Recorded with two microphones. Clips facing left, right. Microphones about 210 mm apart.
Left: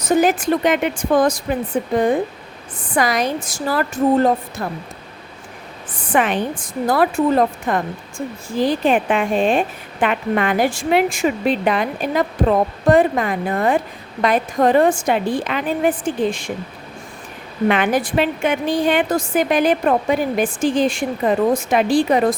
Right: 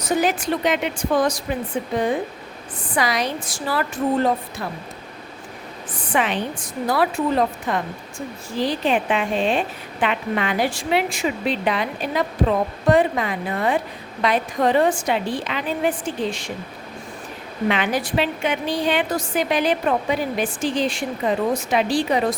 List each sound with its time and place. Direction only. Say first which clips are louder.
0.2 s a woman's voice: left 5 dB; 50° left (ahead or behind)
5.9 s a woman's voice: left 4 dB; 50° left (ahead or behind)
17.7 s a woman's voice: left 4 dB; 50° left (ahead or behind)